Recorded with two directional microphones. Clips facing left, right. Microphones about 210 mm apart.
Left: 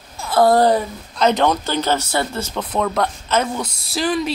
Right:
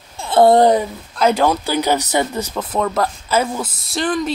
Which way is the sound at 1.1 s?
5° right (ahead or behind).